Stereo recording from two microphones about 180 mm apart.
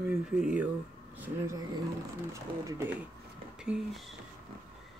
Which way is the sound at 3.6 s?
5° right (ahead or behind).